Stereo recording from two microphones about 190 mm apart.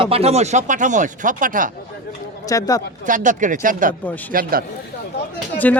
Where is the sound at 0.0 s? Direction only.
30° right (ahead or behind).